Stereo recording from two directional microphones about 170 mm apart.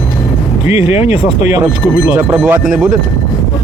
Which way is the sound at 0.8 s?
40° left (ahead or behind).